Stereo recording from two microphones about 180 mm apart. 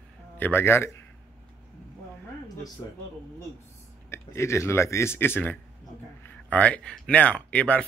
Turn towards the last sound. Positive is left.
turn(degrees=5)  # may be behind; listen again after turning